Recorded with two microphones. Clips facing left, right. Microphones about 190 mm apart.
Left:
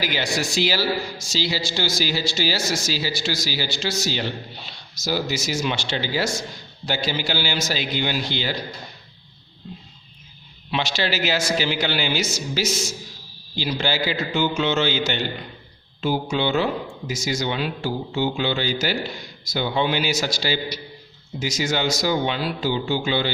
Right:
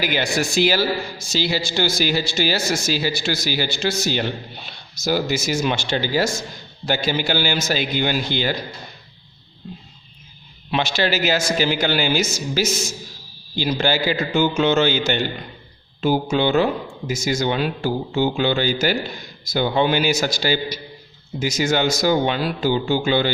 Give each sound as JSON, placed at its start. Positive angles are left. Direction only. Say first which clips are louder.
{"t": 0.0, "sound": "a man's voice", "louder": "right 3 dB", "side_deg": -55}
{"t": 10.7, "sound": "a man's voice", "louder": "right 4 dB", "side_deg": -50}